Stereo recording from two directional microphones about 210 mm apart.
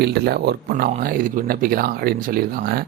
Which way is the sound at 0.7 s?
40° right (ahead or behind).